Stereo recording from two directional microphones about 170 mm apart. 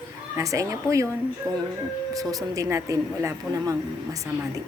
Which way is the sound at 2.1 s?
20° right (ahead or behind).